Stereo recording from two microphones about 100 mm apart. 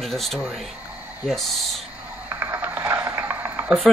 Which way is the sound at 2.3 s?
20° right (ahead or behind).